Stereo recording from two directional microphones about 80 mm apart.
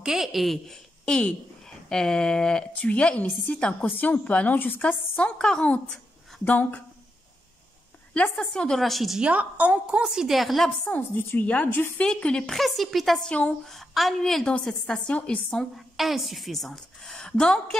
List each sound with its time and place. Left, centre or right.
0.0 s a woman's voice: centre
6.4 s a woman's voice: left
8.1 s a woman's voice: centre
9.2 s a woman's voice: centre
10.0 s a woman's voice: centre
10.9 s a woman's voice: left
12.0 s a woman's voice: centre
13.3 s a woman's voice: centre
13.7 s a woman's voice: centre
15.7 s a woman's voice: centre